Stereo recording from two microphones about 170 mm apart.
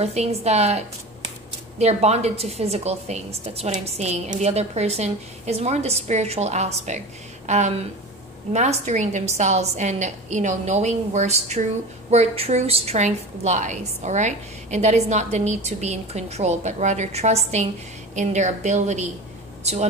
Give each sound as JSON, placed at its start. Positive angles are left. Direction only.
{"t": 0.0, "sound": "a woman's voice", "side_deg": -40}